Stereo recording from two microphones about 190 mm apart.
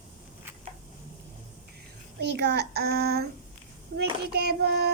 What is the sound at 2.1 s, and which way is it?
Speech, 60° right (ahead or behind).